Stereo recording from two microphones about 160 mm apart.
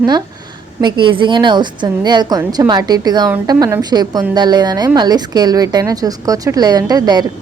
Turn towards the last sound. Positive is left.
turn(degrees=-25)  # may be behind; listen again after turning